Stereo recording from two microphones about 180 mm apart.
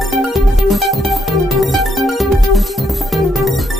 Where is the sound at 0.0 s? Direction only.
Centre (ahead or behind).